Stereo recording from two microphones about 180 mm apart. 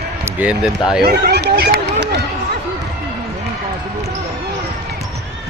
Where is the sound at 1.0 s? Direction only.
65° right (ahead or behind).